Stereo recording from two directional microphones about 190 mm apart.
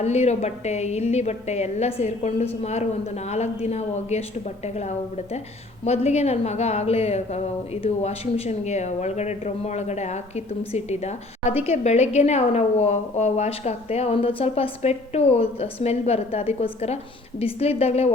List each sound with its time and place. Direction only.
0.0 s a woman's voice: 35° left (ahead or behind)